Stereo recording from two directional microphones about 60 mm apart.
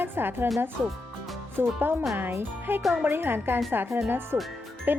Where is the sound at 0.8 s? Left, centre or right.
Centre.